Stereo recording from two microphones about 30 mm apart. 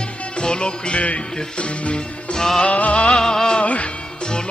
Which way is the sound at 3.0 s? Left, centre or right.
Left.